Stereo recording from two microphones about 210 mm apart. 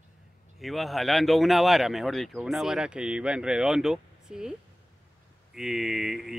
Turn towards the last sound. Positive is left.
turn(degrees=0)  # may be behind; listen again after turning